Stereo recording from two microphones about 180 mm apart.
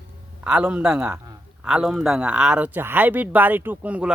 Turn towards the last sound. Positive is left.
turn(degrees=-5)  # may be behind; listen again after turning